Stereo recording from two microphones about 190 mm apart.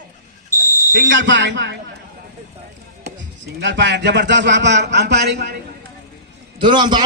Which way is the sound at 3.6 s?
70° right (ahead or behind).